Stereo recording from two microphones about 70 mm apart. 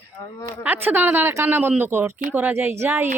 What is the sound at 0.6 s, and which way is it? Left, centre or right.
A woman's voice, right.